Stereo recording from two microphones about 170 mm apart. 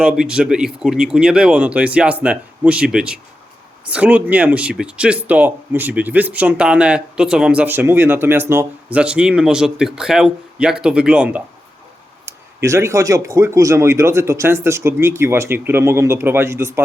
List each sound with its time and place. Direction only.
0.0 s speech: 5° right (ahead or behind)